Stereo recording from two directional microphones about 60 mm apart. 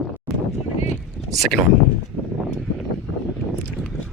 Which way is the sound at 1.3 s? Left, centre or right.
Centre.